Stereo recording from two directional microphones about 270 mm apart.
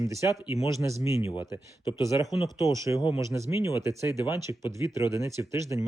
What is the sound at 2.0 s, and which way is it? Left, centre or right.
Speech, centre.